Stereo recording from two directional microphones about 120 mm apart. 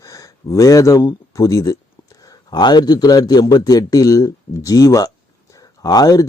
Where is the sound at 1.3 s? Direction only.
30° left (ahead or behind).